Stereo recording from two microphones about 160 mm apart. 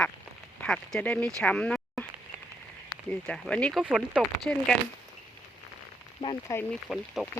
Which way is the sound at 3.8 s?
5° right (ahead or behind).